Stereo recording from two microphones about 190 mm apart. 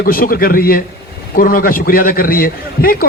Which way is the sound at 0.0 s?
50° left (ahead or behind).